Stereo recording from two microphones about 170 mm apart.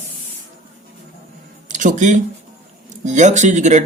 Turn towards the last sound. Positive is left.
turn(degrees=-45)  # may be behind; listen again after turning